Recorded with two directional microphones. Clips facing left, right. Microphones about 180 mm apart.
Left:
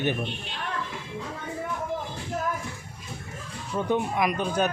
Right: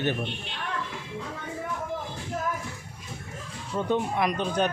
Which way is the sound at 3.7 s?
10° left (ahead or behind).